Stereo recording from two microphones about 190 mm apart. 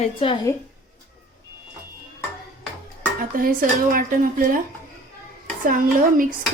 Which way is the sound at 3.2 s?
45° right (ahead or behind).